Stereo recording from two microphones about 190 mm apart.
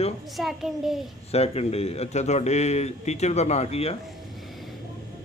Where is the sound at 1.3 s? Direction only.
35° left (ahead or behind).